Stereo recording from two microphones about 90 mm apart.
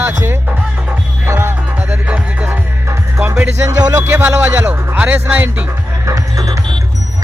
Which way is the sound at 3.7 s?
40° right (ahead or behind).